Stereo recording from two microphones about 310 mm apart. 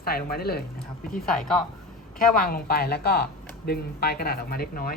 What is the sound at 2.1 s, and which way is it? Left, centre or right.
Speech, left.